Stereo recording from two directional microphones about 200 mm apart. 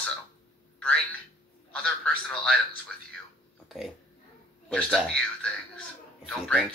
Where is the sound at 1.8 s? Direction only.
5° left (ahead or behind).